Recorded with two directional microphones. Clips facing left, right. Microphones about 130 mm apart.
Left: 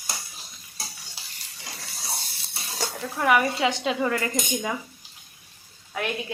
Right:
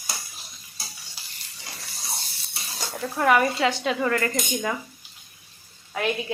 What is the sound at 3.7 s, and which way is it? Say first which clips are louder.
Speech: right 1 dB; 20° left (ahead or behind).